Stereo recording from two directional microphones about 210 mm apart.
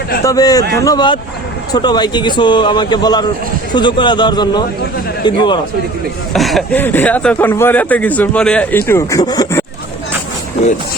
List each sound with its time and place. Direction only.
0.3 s speech: 15° left (ahead or behind)
6.3 s speech: centre (ahead or behind)